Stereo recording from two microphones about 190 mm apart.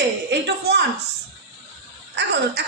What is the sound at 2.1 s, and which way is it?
Speech, 65° right (ahead or behind).